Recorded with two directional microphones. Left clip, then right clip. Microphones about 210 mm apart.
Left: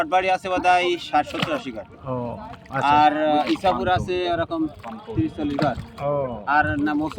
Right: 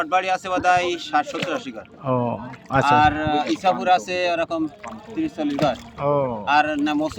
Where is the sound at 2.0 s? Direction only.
40° right (ahead or behind).